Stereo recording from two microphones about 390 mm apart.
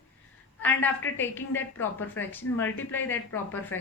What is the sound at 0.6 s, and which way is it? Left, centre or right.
A woman's voice, centre.